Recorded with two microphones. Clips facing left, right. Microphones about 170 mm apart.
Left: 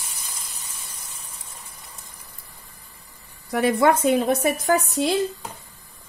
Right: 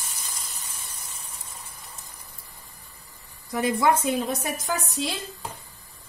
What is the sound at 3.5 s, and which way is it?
A woman's voice, 65° left (ahead or behind).